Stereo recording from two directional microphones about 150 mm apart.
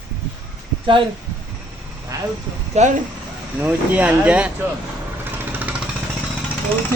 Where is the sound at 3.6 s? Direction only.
10° right (ahead or behind).